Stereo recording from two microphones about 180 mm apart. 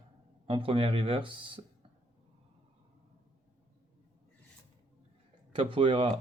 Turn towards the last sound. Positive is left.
turn(degrees=-30)  # may be behind; listen again after turning